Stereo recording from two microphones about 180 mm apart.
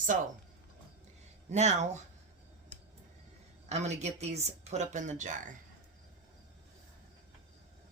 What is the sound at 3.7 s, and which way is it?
Speech, 40° right (ahead or behind).